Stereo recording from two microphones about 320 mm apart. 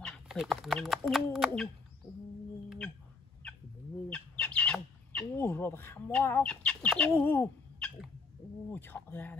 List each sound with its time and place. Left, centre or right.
0.0 s speech: centre
3.4 s chicken: centre
4.1 s squawk: centre
8.7 s speech: centre